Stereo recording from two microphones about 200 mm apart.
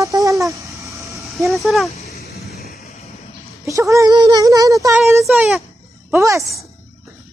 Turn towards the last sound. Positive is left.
turn(degrees=-15)  # may be behind; listen again after turning